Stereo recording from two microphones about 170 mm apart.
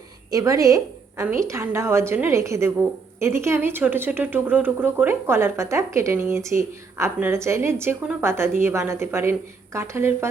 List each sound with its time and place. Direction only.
0.3 s a woman's voice: 20° right (ahead or behind)